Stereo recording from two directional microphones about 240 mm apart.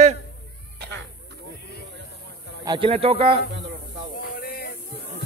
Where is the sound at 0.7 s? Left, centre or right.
Right.